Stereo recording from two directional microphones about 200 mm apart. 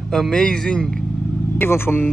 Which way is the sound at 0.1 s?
5° left (ahead or behind).